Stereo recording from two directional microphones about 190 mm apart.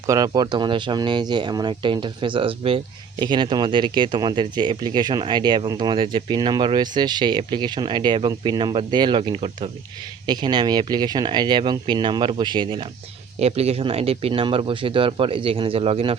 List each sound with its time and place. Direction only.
0.1 s speech: 20° right (ahead or behind)